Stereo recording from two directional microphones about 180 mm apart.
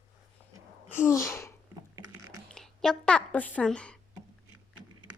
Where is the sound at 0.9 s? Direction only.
15° left (ahead or behind).